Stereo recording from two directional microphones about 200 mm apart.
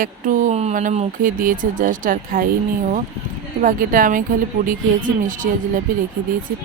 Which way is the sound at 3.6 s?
45° right (ahead or behind).